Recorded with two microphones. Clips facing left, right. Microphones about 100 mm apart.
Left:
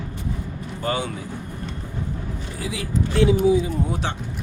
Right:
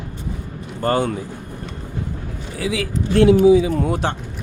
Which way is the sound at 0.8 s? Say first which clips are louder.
Right 7 dB; 45° right (ahead or behind).